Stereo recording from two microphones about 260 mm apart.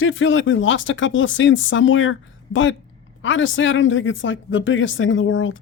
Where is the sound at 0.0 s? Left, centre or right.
Left.